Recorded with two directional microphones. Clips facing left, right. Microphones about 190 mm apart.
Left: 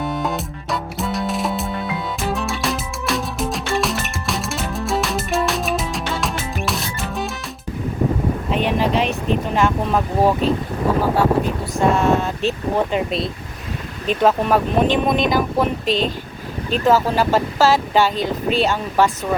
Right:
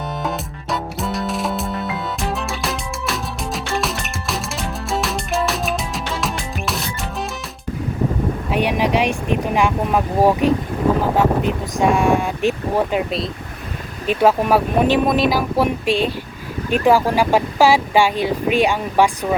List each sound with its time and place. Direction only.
0.2 s music: centre (ahead or behind)
8.4 s speech: 10° right (ahead or behind)
14.1 s speech: 10° right (ahead or behind)